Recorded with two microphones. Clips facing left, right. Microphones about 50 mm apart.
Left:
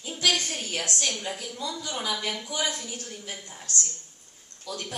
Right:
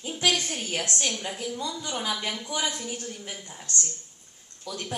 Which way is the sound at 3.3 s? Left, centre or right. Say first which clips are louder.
Even; centre.